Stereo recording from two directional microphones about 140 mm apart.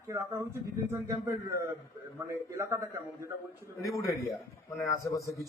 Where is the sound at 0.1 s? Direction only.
20° right (ahead or behind).